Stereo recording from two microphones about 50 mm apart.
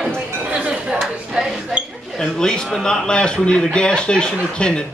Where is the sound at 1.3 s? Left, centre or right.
Centre.